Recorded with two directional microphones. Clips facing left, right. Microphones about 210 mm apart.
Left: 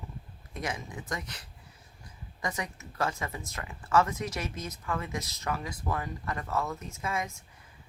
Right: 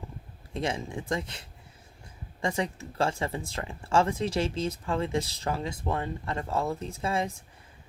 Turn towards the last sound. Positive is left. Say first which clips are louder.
# right 5 dB
turn(degrees=-30)  # may be behind; listen again after turning